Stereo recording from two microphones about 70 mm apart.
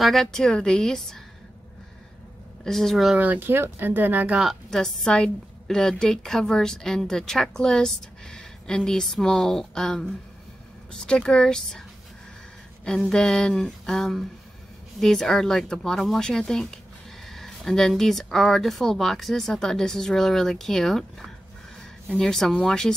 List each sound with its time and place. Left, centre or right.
0.0 s a woman's voice: centre
2.6 s speech: centre
3.2 s speech: right
4.6 s a woman's voice: centre
12.8 s a woman's voice: centre